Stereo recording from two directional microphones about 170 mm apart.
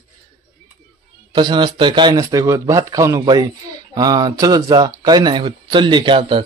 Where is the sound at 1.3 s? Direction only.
25° right (ahead or behind).